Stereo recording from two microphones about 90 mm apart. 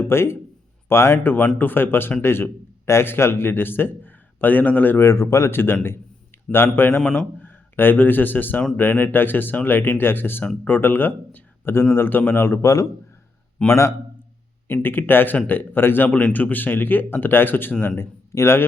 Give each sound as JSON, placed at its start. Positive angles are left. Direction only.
{"t": 0.0, "sound": "a man's voice", "side_deg": 30}
{"t": 5.0, "sound": "speech", "side_deg": 35}
{"t": 7.0, "sound": "speech", "side_deg": 10}
{"t": 7.4, "sound": "a man's voice", "side_deg": 20}